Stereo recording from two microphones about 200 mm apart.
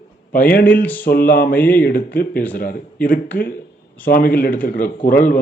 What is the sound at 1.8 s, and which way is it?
A man's voice, 45° left (ahead or behind).